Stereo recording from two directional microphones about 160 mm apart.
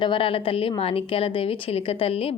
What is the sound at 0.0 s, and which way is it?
A woman's voice, 30° left (ahead or behind).